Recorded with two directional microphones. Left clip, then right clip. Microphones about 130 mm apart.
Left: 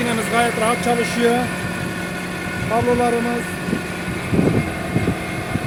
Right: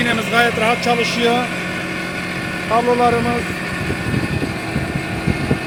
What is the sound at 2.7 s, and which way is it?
Speech, 5° right (ahead or behind).